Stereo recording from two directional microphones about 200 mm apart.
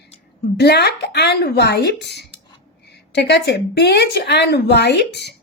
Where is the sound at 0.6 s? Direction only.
55° left (ahead or behind).